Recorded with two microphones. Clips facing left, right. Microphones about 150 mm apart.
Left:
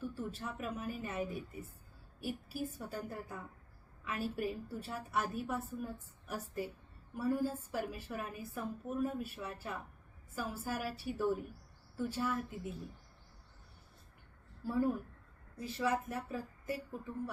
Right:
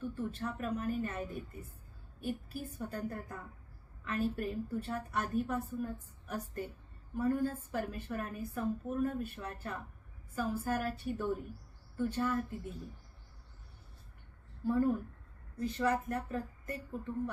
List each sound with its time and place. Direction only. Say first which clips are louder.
0.0 s a woman's voice: right 3 dB; 5° left (ahead or behind)
14.6 s a woman's voice: right 3 dB; 10° left (ahead or behind)